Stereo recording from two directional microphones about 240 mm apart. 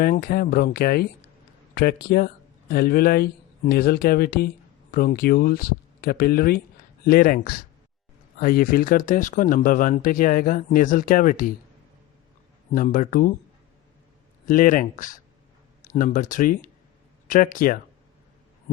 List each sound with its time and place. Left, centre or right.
0.0 s speech: left
12.7 s speech: left
14.4 s speech: left